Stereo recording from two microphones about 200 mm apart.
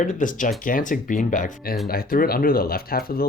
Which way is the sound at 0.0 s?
40° left (ahead or behind).